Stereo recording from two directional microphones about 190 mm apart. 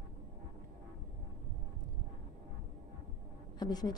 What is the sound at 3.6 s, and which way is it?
Speech, 20° left (ahead or behind).